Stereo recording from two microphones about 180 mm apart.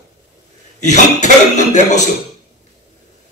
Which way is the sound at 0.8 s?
40° left (ahead or behind).